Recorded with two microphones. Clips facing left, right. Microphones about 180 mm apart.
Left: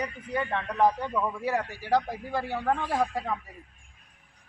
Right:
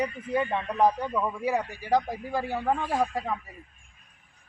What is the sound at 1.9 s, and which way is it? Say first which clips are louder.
Speech: right 1 dB; 15° right (ahead or behind).